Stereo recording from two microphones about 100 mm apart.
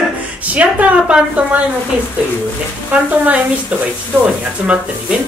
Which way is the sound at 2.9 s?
15° right (ahead or behind).